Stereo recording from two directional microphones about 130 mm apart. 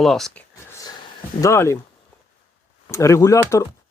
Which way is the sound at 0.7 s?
25° left (ahead or behind).